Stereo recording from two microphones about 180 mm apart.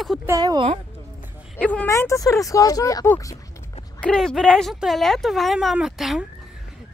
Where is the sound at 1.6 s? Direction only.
5° left (ahead or behind).